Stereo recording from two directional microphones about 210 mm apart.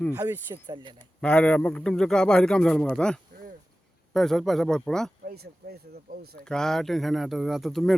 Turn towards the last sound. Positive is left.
turn(degrees=0)  # may be behind; listen again after turning